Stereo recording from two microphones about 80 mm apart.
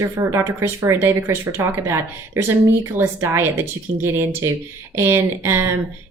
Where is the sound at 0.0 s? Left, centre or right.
Right.